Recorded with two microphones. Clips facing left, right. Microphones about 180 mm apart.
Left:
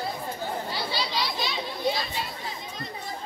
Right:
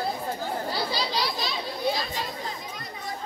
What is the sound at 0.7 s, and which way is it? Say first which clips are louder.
Chatter: right 2 dB; 40° right (ahead or behind).